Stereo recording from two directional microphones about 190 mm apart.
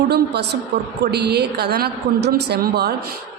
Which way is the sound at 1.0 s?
60° right (ahead or behind).